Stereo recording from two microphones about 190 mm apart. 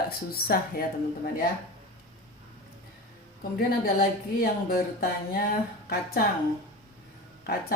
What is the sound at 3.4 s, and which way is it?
Speech, 50° left (ahead or behind).